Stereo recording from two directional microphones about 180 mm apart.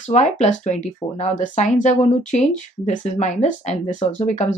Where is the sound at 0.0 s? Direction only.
40° left (ahead or behind).